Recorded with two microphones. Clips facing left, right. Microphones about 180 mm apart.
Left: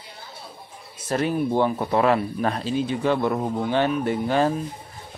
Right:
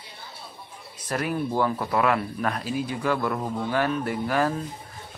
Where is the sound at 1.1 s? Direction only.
25° left (ahead or behind).